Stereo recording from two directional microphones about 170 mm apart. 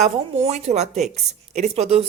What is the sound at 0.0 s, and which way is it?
Speech, 35° right (ahead or behind).